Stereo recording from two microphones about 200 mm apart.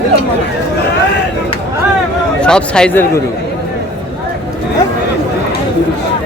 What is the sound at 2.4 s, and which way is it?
Speech, 5° left (ahead or behind).